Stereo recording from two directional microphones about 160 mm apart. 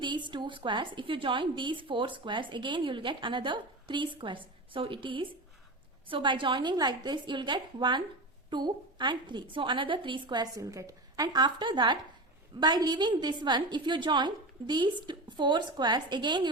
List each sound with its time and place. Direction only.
0.0 s a woman's voice: 30° right (ahead or behind)